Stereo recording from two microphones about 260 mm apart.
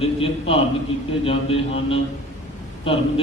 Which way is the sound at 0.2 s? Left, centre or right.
Left.